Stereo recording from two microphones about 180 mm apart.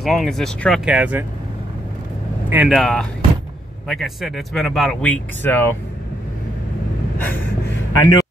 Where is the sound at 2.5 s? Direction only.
5° right (ahead or behind).